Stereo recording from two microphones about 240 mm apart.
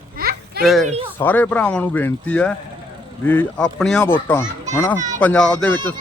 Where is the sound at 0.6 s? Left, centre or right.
Centre.